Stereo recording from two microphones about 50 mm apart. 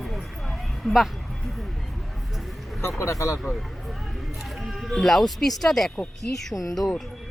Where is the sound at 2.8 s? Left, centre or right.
Left.